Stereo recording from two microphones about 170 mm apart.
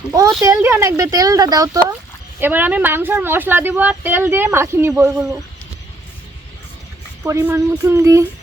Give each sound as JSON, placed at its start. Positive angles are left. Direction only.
{"t": 0.5, "sound": "a woman's voice", "side_deg": -10}
{"t": 7.3, "sound": "a woman's voice", "side_deg": -15}